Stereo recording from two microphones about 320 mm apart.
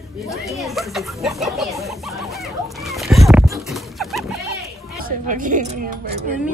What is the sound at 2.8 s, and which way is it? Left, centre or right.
Horse, centre.